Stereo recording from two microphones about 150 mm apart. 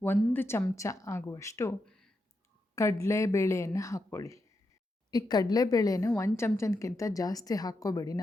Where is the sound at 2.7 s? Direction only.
20° left (ahead or behind).